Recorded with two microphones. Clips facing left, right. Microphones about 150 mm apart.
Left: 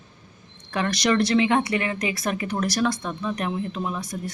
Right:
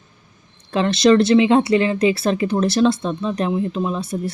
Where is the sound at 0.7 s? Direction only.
25° right (ahead or behind).